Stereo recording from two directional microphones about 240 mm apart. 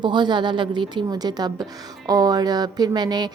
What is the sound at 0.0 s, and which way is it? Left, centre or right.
Speech, centre.